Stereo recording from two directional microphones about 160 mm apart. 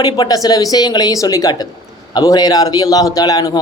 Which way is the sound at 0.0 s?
25° left (ahead or behind).